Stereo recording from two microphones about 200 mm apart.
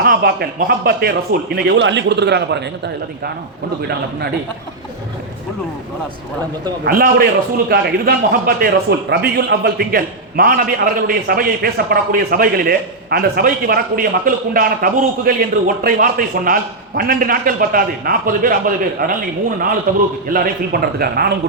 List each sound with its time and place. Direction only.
0.0 s a man's voice: 50° right (ahead or behind)
6.8 s a man's voice: 50° right (ahead or behind)